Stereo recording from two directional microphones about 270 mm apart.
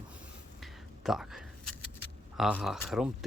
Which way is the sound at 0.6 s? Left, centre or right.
Centre.